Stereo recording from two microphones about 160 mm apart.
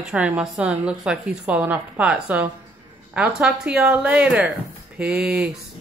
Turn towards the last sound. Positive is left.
turn(degrees=-5)  # may be behind; listen again after turning